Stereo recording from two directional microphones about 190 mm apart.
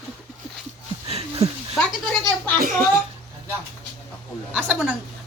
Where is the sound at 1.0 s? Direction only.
30° right (ahead or behind).